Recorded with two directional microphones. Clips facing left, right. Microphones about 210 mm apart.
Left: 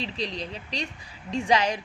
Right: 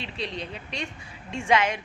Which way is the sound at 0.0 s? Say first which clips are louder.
Left 2 dB; 35° left (ahead or behind).